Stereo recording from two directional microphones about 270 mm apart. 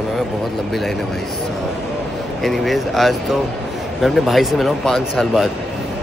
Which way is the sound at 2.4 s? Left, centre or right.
Centre.